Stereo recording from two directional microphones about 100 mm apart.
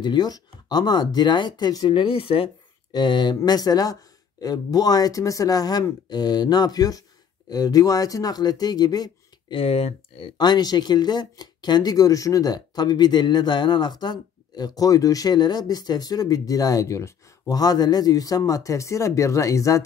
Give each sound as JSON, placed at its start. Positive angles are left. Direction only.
{"t": 0.0, "sound": "speech", "side_deg": 45}
{"t": 1.9, "sound": "speech", "side_deg": 65}
{"t": 2.9, "sound": "speech", "side_deg": 45}
{"t": 9.5, "sound": "speech", "side_deg": 70}
{"t": 10.3, "sound": "speech", "side_deg": 45}